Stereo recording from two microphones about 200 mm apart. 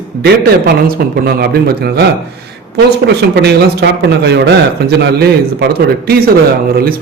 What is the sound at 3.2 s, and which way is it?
A man's voice, 55° right (ahead or behind).